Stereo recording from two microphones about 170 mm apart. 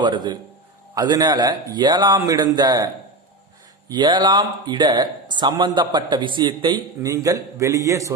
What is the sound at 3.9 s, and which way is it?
Speech, 25° right (ahead or behind).